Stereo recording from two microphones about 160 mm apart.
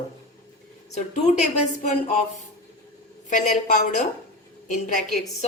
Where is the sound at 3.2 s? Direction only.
50° left (ahead or behind).